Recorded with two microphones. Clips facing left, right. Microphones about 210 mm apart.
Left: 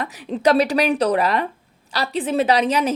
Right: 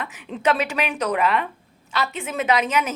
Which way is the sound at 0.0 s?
35° left (ahead or behind).